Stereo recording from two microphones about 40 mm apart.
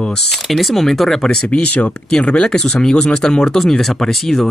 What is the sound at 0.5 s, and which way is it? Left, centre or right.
Speech, centre.